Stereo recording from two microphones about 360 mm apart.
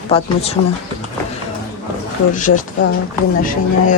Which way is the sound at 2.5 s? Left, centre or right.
Left.